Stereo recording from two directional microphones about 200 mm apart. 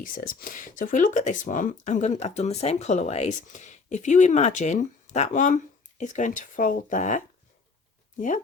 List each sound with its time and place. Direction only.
0.0 s speech: 45° left (ahead or behind)